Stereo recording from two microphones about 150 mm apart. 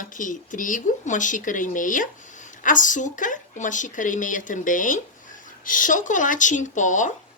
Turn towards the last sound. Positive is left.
turn(degrees=55)  # may be behind; listen again after turning